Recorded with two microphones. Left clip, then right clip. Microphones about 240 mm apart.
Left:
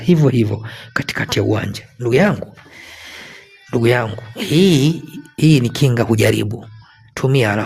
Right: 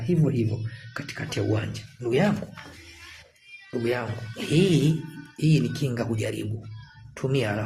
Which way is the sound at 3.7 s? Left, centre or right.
Left.